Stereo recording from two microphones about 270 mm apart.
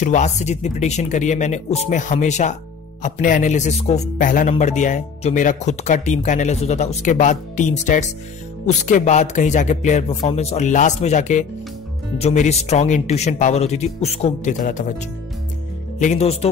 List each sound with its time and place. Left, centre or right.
0.0 s speech: left